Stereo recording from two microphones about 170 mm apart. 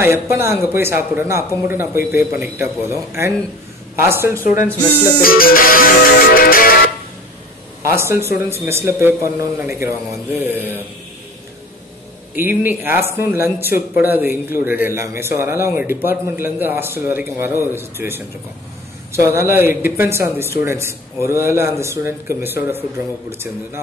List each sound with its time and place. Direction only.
0.0 s speech: 15° right (ahead or behind)
5.2 s music: 60° left (ahead or behind)
7.8 s speech: 15° right (ahead or behind)
12.4 s speech: 10° right (ahead or behind)